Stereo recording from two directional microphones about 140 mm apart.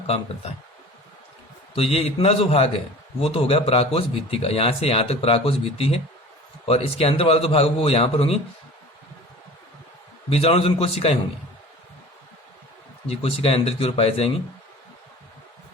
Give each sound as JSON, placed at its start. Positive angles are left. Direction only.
{"t": 1.7, "sound": "a man's voice", "side_deg": 45}
{"t": 10.3, "sound": "a man's voice", "side_deg": 45}
{"t": 13.1, "sound": "a man's voice", "side_deg": 45}